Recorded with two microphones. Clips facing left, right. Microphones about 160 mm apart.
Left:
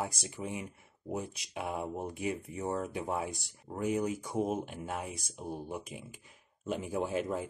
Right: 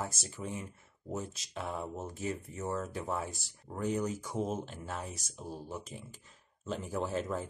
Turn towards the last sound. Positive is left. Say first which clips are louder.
# left 2 dB
turn(degrees=10)  # may be behind; listen again after turning